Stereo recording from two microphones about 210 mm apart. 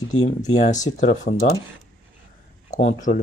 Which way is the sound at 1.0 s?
35° left (ahead or behind).